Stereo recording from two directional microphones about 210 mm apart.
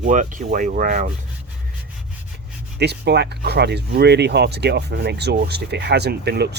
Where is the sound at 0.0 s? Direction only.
35° right (ahead or behind).